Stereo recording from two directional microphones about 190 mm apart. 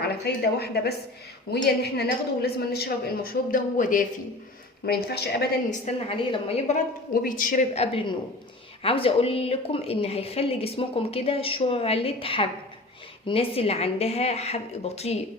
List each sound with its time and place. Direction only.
0.0 s a woman's voice: 55° left (ahead or behind)
4.9 s a woman's voice: 55° left (ahead or behind)
5.8 s a woman's voice: 25° left (ahead or behind)
7.1 s a woman's voice: 50° left (ahead or behind)
8.8 s a woman's voice: 30° left (ahead or behind)